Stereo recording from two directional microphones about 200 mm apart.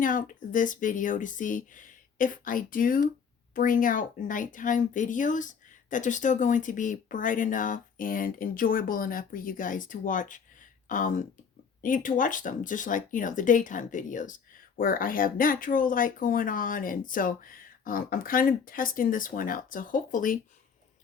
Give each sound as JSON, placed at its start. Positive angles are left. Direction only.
{"t": 0.0, "sound": "speech", "side_deg": 40}